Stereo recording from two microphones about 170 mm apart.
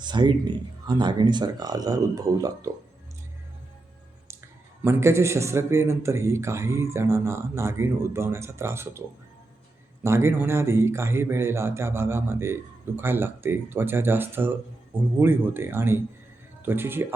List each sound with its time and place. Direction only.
0.0 s speech: 25° right (ahead or behind)
4.8 s a man's voice: 15° right (ahead or behind)